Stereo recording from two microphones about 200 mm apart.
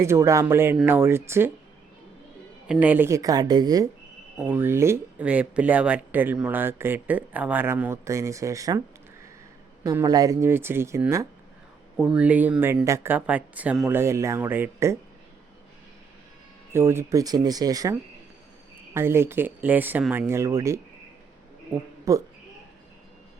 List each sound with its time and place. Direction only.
0.0 s speech: 15° right (ahead or behind)
2.6 s speech: 10° right (ahead or behind)
4.4 s speech: 10° right (ahead or behind)
9.8 s speech: 15° right (ahead or behind)
16.7 s speech: 10° right (ahead or behind)
18.9 s speech: 10° right (ahead or behind)
22.1 s speech: 15° right (ahead or behind)